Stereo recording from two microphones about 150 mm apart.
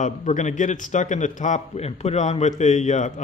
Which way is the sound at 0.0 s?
55° left (ahead or behind).